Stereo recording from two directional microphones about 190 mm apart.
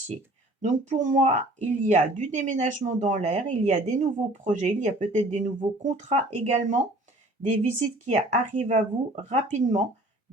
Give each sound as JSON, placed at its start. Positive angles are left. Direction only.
{"t": 0.6, "sound": "speech", "side_deg": -40}